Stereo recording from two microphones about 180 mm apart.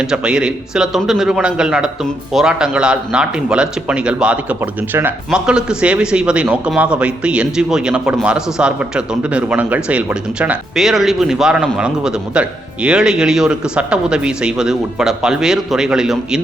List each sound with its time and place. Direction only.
0.0 s speech: 5° right (ahead or behind)